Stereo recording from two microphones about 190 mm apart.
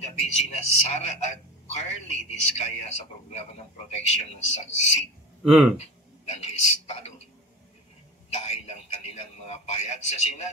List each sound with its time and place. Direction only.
0.0 s a man's voice: 35° left (ahead or behind)
5.4 s speech: centre (ahead or behind)
6.4 s a man's voice: 35° left (ahead or behind)
8.4 s a man's voice: 35° left (ahead or behind)